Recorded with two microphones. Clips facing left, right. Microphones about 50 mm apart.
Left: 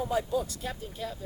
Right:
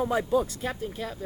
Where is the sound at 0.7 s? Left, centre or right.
Right.